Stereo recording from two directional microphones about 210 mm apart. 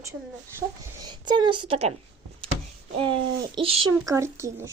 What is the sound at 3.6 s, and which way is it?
Speech, 25° right (ahead or behind).